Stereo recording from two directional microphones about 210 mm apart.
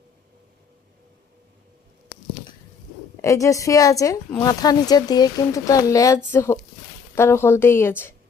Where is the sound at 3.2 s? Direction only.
15° left (ahead or behind).